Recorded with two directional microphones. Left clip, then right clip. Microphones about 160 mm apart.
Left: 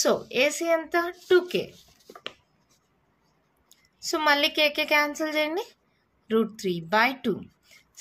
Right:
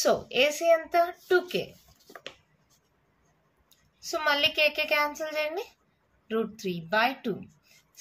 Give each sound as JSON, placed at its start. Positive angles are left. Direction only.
{"t": 0.0, "sound": "a child's voice", "side_deg": 35}
{"t": 3.6, "sound": "a woman's voice", "side_deg": 50}